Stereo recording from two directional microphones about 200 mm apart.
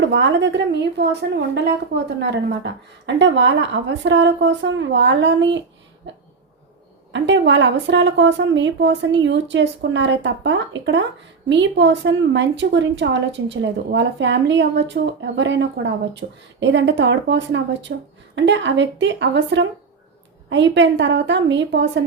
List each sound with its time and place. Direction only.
0.0 s a woman's voice: 65° right (ahead or behind)
6.1 s a sound: 65° right (ahead or behind)
7.1 s a woman's voice: 65° right (ahead or behind)